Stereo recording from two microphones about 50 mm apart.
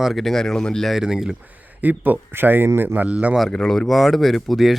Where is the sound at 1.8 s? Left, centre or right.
Right.